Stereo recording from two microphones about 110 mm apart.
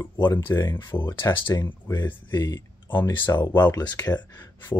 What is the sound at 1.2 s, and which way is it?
Speech, 40° left (ahead or behind).